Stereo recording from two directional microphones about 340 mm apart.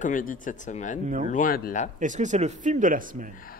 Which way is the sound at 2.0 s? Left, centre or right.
Right.